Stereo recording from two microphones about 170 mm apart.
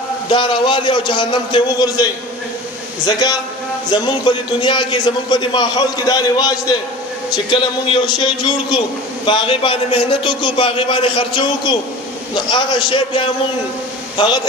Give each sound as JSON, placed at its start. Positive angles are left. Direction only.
{"t": 0.3, "sound": "a man's voice", "side_deg": 30}
{"t": 3.9, "sound": "a man's voice", "side_deg": 25}